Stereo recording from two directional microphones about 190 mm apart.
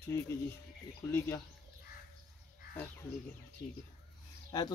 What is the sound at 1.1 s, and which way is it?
Speech, 10° left (ahead or behind).